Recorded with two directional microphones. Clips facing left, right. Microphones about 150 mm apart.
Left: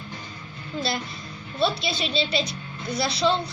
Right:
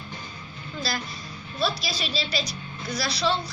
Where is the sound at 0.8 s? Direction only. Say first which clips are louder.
Left 3 dB; 25° left (ahead or behind).